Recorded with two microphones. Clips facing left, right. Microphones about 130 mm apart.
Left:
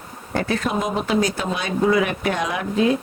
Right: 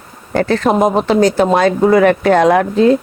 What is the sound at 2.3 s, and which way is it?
Speech, 90° right.